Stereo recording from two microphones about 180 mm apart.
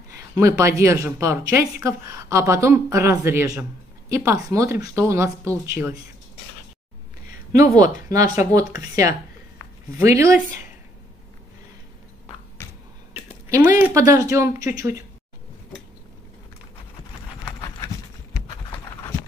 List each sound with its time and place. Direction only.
0.1 s a woman's voice: 15° right (ahead or behind)
7.5 s a woman's voice: 20° right (ahead or behind)
13.5 s a woman's voice: 15° right (ahead or behind)